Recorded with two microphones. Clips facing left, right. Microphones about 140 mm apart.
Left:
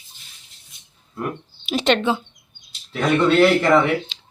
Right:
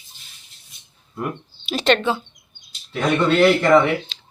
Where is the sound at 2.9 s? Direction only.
Centre (ahead or behind).